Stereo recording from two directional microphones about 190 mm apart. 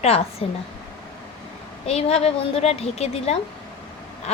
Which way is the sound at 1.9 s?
35° left (ahead or behind).